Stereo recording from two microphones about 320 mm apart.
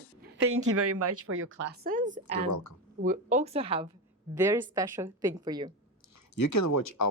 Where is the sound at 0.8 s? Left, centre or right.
Right.